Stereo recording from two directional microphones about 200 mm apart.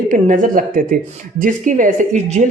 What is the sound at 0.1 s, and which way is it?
Speech, 40° right (ahead or behind).